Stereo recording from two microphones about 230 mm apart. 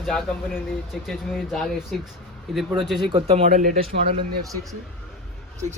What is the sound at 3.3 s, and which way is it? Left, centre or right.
Speech, right.